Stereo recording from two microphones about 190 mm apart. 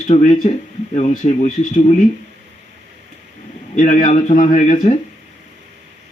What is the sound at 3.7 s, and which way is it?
Speech, 40° left (ahead or behind).